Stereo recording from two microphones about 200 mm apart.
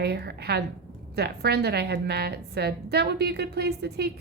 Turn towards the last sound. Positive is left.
turn(degrees=-55)  # may be behind; listen again after turning